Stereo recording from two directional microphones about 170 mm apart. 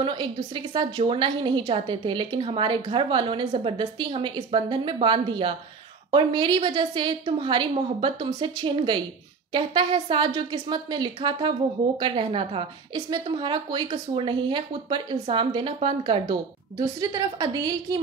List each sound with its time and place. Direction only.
0.0 s a woman's voice: 30° right (ahead or behind)